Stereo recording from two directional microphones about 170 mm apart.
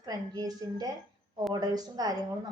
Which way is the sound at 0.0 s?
20° right (ahead or behind).